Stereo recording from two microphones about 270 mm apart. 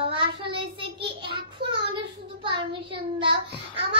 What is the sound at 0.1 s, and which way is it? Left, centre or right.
Child singing, centre.